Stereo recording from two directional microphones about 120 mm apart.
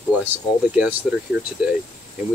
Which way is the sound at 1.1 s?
5° right (ahead or behind).